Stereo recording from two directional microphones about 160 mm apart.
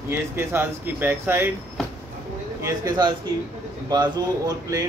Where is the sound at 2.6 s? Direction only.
20° right (ahead or behind).